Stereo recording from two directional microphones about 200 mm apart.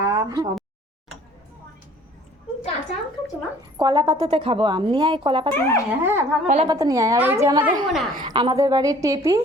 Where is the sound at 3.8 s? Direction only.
25° right (ahead or behind).